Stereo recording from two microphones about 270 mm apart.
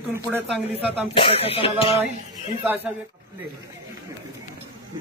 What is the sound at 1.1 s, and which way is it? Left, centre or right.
Music, centre.